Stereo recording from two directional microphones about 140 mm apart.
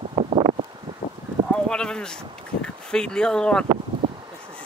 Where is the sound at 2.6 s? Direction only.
5° left (ahead or behind).